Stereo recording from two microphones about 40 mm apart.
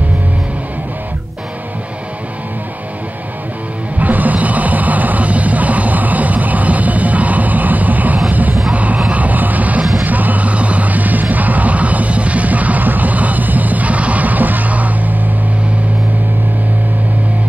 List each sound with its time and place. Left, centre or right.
4.0 s music: right
8.7 s a sound: right
10.0 s music: right